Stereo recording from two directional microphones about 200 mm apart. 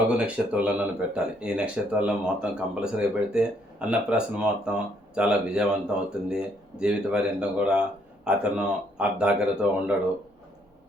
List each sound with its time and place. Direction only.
0.1 s speech: 5° right (ahead or behind)